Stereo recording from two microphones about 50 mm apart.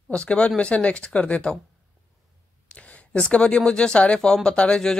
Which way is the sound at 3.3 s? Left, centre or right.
Left.